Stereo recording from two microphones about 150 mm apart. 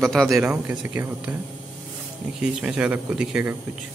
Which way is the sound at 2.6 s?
10° right (ahead or behind).